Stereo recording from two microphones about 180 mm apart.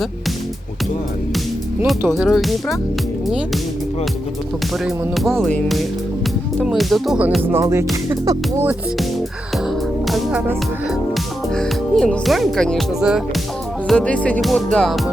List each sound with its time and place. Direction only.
2.1 s speech: centre (ahead or behind)
5.1 s speech: centre (ahead or behind)
6.7 s music: centre (ahead or behind)
10.1 s music: centre (ahead or behind)
11.5 s speech: 5° left (ahead or behind)